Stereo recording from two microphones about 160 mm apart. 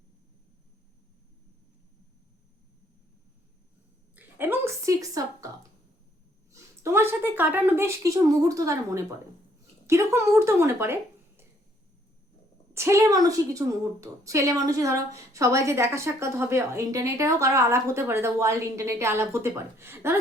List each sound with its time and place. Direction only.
4.1 s a sound: 10° right (ahead or behind)
6.5 s a woman's voice: 15° right (ahead or behind)
12.7 s a woman's voice: 15° right (ahead or behind)